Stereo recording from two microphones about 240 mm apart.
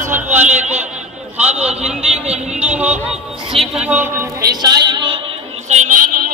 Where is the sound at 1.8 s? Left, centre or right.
Centre.